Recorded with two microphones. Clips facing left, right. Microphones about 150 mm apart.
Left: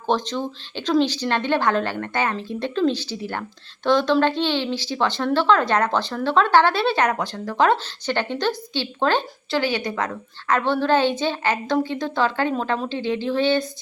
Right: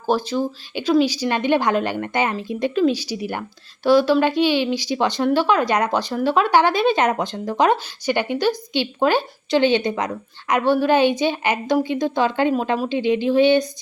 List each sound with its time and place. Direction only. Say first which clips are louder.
0.1 s speech: right 3 dB; 10° right (ahead or behind)
9.6 s speech: right 5 dB; 25° right (ahead or behind)